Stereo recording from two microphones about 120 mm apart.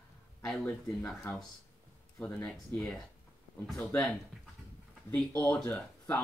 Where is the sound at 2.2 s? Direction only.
15° left (ahead or behind).